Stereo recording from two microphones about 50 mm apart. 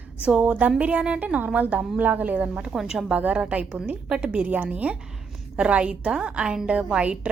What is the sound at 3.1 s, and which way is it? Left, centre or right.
A woman's voice, right.